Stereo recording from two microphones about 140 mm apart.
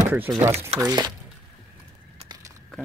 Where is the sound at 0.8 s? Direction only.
30° right (ahead or behind).